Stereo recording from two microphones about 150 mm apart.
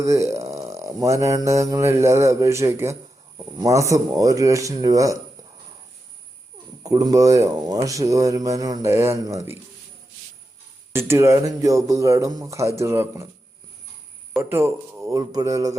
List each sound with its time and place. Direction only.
0.0 s speech: 20° right (ahead or behind)
6.8 s speech: 25° right (ahead or behind)
10.9 s speech: 15° right (ahead or behind)
14.5 s speech: 20° right (ahead or behind)